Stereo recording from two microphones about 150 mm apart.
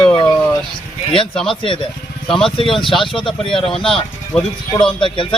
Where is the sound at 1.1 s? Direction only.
35° left (ahead or behind).